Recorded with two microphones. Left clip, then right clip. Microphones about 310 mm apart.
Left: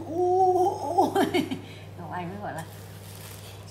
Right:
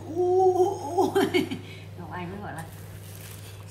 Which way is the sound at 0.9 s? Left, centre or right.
Left.